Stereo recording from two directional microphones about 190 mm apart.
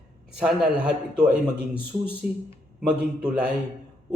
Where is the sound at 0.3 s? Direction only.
5° right (ahead or behind).